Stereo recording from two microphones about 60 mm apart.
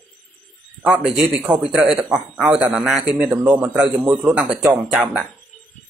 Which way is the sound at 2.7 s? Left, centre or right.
Centre.